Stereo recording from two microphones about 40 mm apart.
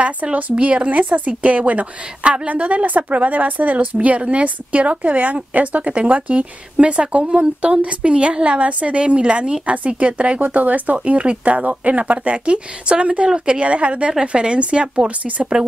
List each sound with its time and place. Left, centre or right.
0.0 s a woman's voice: right